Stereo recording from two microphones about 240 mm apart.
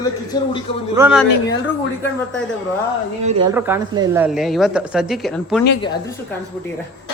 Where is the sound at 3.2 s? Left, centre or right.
Right.